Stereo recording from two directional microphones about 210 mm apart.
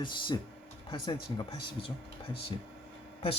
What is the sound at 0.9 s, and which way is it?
Speech, 25° left (ahead or behind).